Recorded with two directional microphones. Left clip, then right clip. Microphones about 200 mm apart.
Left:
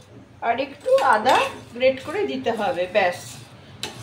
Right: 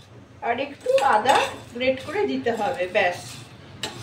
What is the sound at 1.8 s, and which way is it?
A woman's voice, 25° left (ahead or behind).